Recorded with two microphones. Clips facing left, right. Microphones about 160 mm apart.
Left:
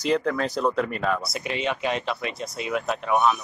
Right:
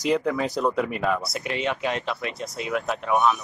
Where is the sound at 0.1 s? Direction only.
10° right (ahead or behind).